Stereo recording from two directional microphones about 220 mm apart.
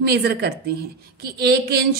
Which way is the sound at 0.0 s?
45° right (ahead or behind).